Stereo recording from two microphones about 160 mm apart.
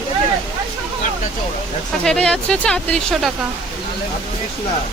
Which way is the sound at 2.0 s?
5° left (ahead or behind).